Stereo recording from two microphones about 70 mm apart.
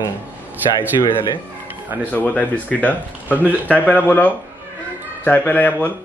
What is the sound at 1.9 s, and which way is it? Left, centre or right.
Speech, right.